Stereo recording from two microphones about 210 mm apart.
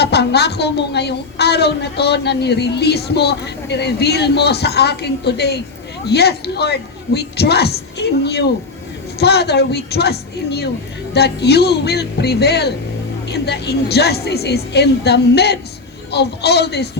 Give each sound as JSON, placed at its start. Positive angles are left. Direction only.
{"t": 0.0, "sound": "a woman's voice", "side_deg": 50}